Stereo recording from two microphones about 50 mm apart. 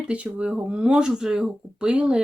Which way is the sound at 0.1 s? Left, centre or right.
Right.